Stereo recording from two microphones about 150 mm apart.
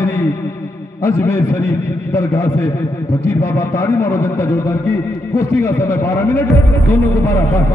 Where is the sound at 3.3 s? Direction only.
20° left (ahead or behind).